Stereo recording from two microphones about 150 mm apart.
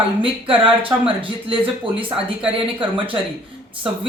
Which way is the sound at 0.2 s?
35° right (ahead or behind).